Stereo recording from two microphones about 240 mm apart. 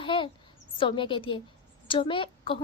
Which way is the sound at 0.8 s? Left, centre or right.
Left.